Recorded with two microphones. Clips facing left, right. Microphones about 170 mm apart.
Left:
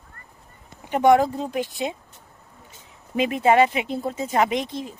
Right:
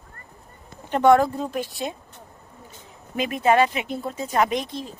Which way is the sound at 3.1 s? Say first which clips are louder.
Left 2 dB; 25° left (ahead or behind).